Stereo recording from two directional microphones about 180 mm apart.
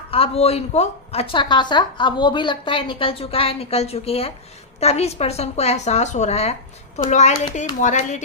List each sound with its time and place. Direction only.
0.1 s a woman's voice: 35° left (ahead or behind)